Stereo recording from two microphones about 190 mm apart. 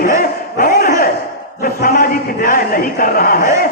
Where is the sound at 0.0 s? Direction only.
45° left (ahead or behind).